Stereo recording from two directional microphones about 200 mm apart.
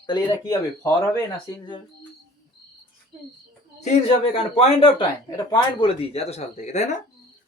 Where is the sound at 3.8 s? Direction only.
30° left (ahead or behind).